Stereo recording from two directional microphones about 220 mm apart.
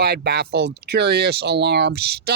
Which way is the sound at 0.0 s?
45° right (ahead or behind).